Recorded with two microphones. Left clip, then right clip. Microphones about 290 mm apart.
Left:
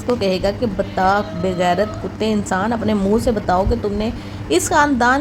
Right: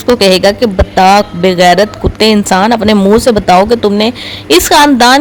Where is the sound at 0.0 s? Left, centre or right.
Right.